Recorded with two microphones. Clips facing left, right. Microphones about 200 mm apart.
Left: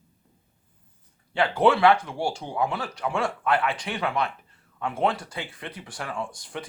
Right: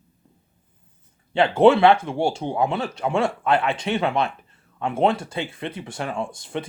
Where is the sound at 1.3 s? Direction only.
25° right (ahead or behind).